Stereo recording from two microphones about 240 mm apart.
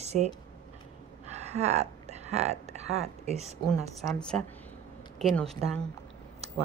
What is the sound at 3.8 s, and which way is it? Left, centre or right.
Speech, centre.